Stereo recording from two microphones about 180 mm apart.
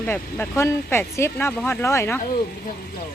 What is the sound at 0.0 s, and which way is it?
Speech, 10° left (ahead or behind).